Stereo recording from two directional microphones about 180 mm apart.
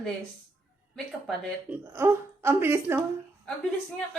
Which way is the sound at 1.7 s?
15° right (ahead or behind).